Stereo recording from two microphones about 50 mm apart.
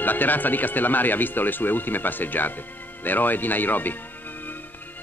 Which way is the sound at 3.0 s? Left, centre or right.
Left.